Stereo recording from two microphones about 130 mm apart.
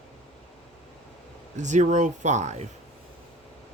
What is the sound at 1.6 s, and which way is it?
Speech, 70° right (ahead or behind).